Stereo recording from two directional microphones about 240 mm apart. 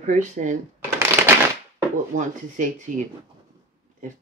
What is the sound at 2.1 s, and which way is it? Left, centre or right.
Speech, right.